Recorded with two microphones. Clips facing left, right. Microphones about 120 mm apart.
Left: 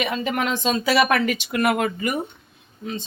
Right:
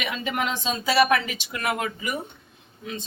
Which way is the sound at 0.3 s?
60° left (ahead or behind).